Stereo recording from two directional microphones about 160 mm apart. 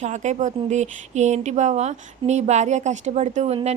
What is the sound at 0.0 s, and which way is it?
Speech, 45° right (ahead or behind).